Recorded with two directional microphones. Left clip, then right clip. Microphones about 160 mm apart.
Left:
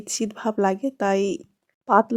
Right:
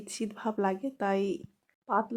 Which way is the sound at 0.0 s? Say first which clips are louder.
Left 8 dB; 40° left (ahead or behind).